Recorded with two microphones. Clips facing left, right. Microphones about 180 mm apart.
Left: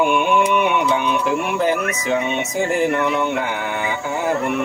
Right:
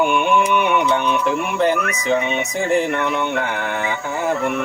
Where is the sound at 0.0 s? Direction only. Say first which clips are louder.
Even; 5° left (ahead or behind).